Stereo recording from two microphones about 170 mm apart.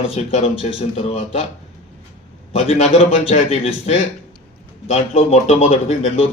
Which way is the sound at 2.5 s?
40° left (ahead or behind).